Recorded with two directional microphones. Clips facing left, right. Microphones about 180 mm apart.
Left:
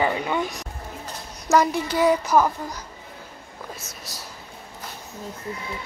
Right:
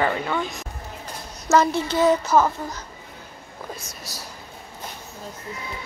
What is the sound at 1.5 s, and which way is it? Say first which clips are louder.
Speech: right 1 dB; 15° left (ahead or behind).